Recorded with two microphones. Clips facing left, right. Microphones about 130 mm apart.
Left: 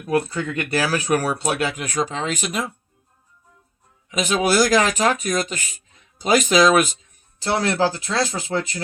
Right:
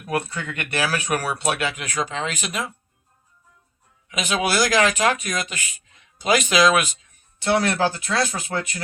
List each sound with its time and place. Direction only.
0.3 s speech: 35° left (ahead or behind)
4.2 s speech: 40° left (ahead or behind)
7.6 s speech: 30° left (ahead or behind)